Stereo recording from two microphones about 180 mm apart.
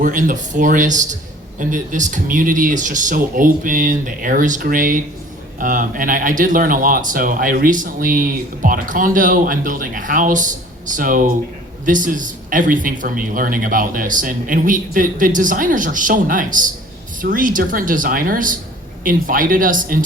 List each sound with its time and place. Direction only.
0.0 s speech: 50° right (ahead or behind)